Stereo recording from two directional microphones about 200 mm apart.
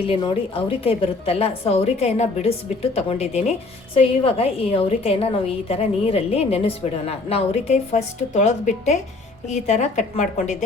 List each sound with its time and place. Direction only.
0.0 s a woman's voice: 25° left (ahead or behind)